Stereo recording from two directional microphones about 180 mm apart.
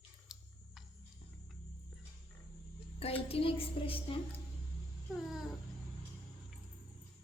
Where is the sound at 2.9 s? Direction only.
35° left (ahead or behind).